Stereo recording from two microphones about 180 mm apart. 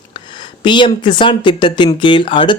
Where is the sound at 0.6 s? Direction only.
25° left (ahead or behind).